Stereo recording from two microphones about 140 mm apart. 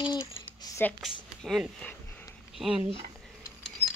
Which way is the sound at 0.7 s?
25° left (ahead or behind).